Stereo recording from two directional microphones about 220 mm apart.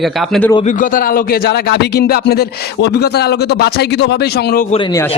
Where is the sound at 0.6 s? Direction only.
35° left (ahead or behind).